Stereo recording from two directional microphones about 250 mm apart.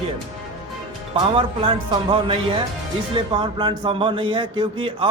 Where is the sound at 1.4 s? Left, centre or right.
Centre.